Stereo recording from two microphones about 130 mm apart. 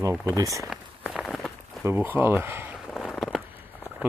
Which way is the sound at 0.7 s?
Centre (ahead or behind).